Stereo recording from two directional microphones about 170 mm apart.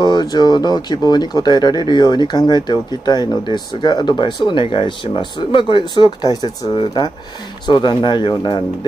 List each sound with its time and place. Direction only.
0.0 s speech: 25° left (ahead or behind)